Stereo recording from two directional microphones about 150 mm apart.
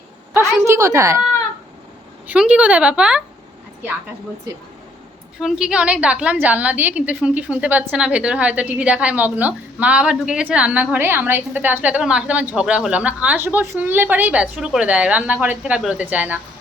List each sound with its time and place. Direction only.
0.6 s a sound: 20° right (ahead or behind)
2.2 s a woman's voice: 10° right (ahead or behind)
5.4 s a woman's voice: 5° right (ahead or behind)